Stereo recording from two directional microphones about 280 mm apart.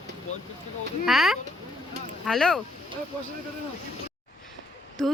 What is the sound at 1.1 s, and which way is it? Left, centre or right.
Speech, centre.